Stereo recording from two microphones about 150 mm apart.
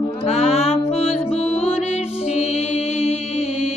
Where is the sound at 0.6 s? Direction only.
40° left (ahead or behind).